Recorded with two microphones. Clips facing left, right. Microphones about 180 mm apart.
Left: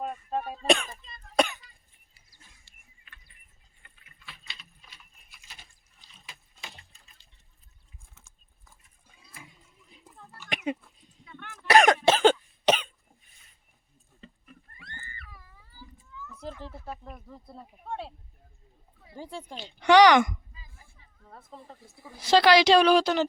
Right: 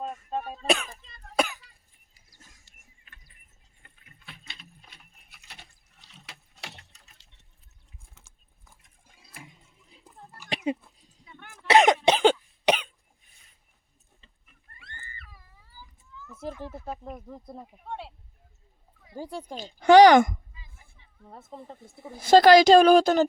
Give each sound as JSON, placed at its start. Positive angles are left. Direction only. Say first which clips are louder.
{"t": 0.0, "sound": "cough", "louder": "left 1 dB", "side_deg": 5}
{"t": 2.6, "sound": "mechanisms", "louder": "even", "side_deg": -45}
{"t": 3.8, "sound": "a sound", "louder": "right 2 dB", "side_deg": -45}
{"t": 10.5, "sound": "a sound", "louder": "right 2 dB", "side_deg": -30}
{"t": 11.3, "sound": "throat clearing", "louder": "left 3 dB", "side_deg": -15}
{"t": 11.7, "sound": "cough", "louder": "right 1 dB", "side_deg": -20}
{"t": 14.2, "sound": "a sound", "louder": "left 17 dB", "side_deg": 60}
{"t": 16.5, "sound": "speech", "louder": "right 4 dB", "side_deg": -15}
{"t": 19.1, "sound": "speech", "louder": "right 4 dB", "side_deg": -10}
{"t": 19.5, "sound": "a woman's voice", "louder": "right 4 dB", "side_deg": -40}
{"t": 20.5, "sound": "a sound", "louder": "left 1 dB", "side_deg": 35}
{"t": 21.2, "sound": "speech", "louder": "right 4 dB", "side_deg": -25}
{"t": 22.2, "sound": "a woman's voice", "louder": "right 5 dB", "side_deg": -50}